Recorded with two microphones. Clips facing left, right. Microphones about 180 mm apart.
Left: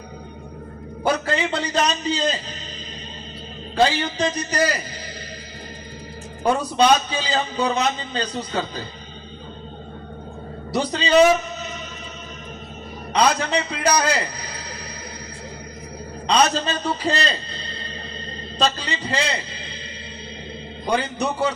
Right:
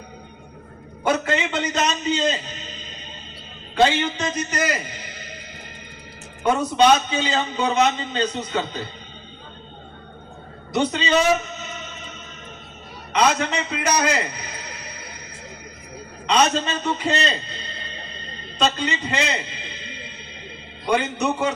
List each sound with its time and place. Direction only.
1.0 s a man's voice: 35° left (ahead or behind)
3.8 s a man's voice: 35° left (ahead or behind)
6.4 s a man's voice: 35° left (ahead or behind)
10.7 s a man's voice: 35° left (ahead or behind)
13.1 s a man's voice: 35° left (ahead or behind)
16.2 s a man's voice: 35° left (ahead or behind)
18.6 s a man's voice: 35° left (ahead or behind)